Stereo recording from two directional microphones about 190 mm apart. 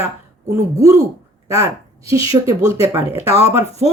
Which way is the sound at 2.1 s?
15° right (ahead or behind).